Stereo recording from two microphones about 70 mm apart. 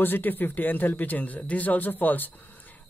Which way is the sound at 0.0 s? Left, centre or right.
Left.